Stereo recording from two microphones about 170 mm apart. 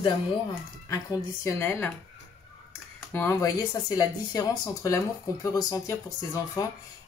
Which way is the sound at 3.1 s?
15° left (ahead or behind).